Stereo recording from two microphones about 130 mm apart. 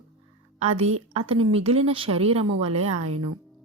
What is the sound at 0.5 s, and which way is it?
A woman's voice, 55° right (ahead or behind).